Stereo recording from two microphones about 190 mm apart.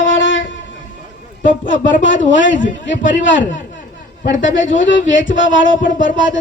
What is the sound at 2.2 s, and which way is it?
A man's voice, 75° left (ahead or behind).